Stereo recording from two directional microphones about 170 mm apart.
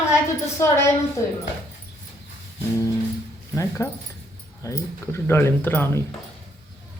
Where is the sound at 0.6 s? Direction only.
15° left (ahead or behind).